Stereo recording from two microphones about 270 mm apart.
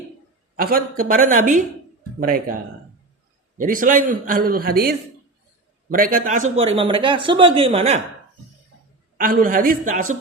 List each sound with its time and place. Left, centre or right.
0.5 s a man's voice: right
3.6 s a man's voice: right
9.1 s a man's voice: right